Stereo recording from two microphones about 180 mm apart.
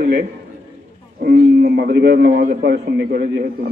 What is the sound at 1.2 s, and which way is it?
A man's voice, 65° right (ahead or behind).